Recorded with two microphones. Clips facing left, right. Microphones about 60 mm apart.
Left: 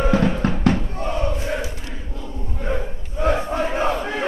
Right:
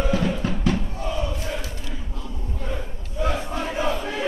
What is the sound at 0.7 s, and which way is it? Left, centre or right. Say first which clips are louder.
Crowd: left 4 dB; left.